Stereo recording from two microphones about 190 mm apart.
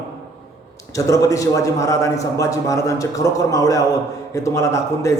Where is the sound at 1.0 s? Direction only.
15° left (ahead or behind).